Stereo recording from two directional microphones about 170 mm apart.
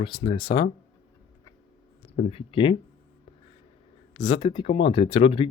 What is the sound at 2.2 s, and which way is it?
Speech, 40° left (ahead or behind).